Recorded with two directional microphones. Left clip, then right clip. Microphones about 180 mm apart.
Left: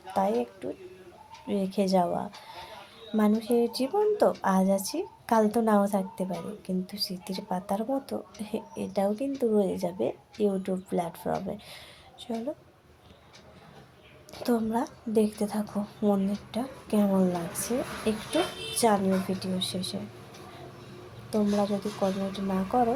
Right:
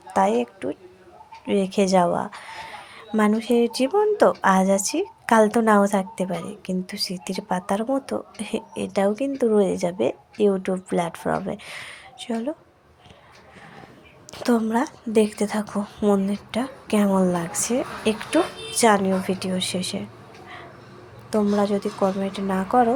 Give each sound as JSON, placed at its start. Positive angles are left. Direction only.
{"t": 0.1, "sound": "a woman's voice", "side_deg": -15}
{"t": 2.0, "sound": "a sound", "side_deg": -20}
{"t": 3.2, "sound": "speech", "side_deg": -15}
{"t": 14.3, "sound": "a woman's voice", "side_deg": -15}
{"t": 21.6, "sound": "speech", "side_deg": -15}